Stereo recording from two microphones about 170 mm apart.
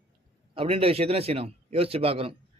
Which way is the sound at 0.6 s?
35° right (ahead or behind).